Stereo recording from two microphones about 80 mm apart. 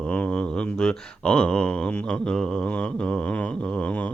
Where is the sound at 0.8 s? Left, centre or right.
Centre.